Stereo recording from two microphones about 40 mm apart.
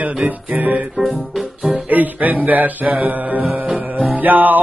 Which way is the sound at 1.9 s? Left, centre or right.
Right.